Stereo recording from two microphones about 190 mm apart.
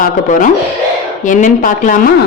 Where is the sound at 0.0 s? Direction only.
45° left (ahead or behind).